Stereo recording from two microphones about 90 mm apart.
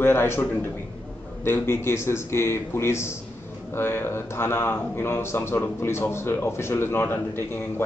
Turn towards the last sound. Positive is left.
turn(degrees=25)  # may be behind; listen again after turning